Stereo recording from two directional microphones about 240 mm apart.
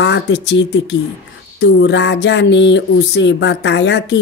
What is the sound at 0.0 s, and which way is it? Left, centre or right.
Speech, left.